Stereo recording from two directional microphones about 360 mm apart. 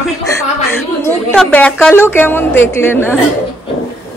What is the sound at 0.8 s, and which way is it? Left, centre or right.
A woman's voice, centre.